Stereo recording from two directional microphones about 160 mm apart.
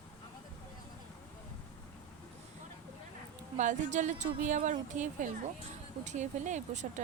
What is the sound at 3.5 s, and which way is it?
Speech, 50° right (ahead or behind).